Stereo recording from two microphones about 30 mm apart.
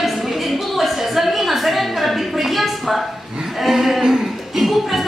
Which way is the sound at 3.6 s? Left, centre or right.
Centre.